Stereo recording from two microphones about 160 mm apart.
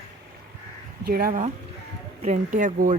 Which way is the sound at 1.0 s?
70° right (ahead or behind).